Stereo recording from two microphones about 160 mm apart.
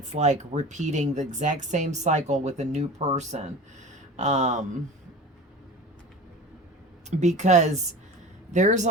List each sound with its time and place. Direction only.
0.1 s speech: 45° right (ahead or behind)
7.1 s speech: 45° right (ahead or behind)